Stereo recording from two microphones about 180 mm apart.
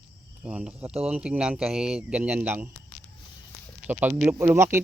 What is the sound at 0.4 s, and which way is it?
Speech, 10° right (ahead or behind).